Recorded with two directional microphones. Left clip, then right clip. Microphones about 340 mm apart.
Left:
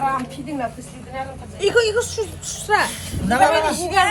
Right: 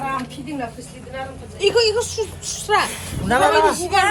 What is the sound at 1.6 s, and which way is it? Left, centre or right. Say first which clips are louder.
Speech: even; centre.